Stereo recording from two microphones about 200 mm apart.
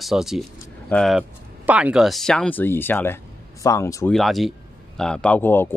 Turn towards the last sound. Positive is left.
turn(degrees=10)  # may be behind; listen again after turning